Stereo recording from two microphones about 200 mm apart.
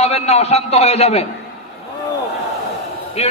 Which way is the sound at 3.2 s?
30° left (ahead or behind).